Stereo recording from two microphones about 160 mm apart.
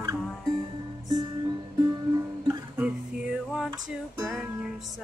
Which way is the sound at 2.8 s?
5° right (ahead or behind).